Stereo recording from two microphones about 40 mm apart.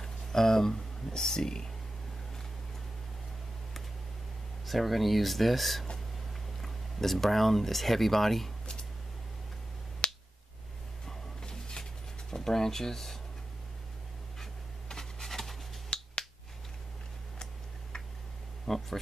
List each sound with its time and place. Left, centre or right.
0.0 s speech: centre
4.6 s speech: centre
10.0 s finger snapping: left
11.1 s a sound: centre
14.4 s pant: centre
15.9 s finger snapping: left
18.7 s speech: centre